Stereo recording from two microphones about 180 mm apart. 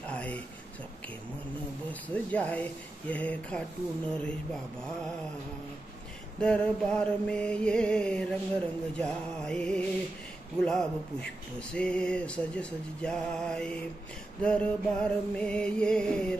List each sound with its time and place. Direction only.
0.0 s a sound: 10° left (ahead or behind)
1.9 s speech: 10° left (ahead or behind)
6.4 s mantra: 5° left (ahead or behind)